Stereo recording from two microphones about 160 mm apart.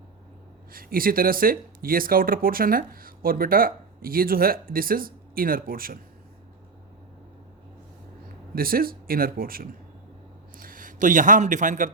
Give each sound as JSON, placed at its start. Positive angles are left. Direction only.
{"t": 0.7, "sound": "speech", "side_deg": -65}
{"t": 8.5, "sound": "a man's voice", "side_deg": -65}